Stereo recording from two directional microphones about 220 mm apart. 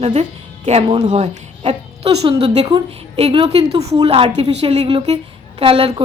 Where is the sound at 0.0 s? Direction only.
30° right (ahead or behind).